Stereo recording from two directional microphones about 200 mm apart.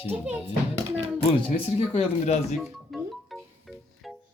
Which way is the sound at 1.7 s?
30° left (ahead or behind).